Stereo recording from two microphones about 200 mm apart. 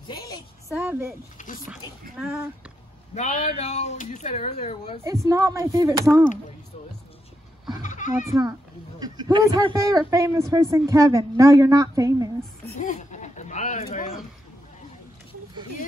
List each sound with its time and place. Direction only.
0.7 s a man's voice: 10° right (ahead or behind)
1.4 s speech: 40° left (ahead or behind)
3.2 s speech: 35° left (ahead or behind)
5.0 s a man's voice: 15° right (ahead or behind)
7.8 s goat: 40° left (ahead or behind)
8.3 s a man's voice: 15° right (ahead or behind)
12.8 s a sound: 40° left (ahead or behind)